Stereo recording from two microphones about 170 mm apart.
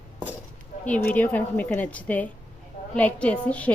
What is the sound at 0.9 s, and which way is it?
Speech, 10° left (ahead or behind).